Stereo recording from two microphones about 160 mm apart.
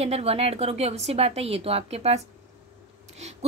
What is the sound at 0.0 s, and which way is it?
A woman's voice, 40° right (ahead or behind).